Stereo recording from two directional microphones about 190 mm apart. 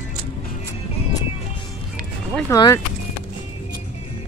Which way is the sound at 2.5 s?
20° left (ahead or behind).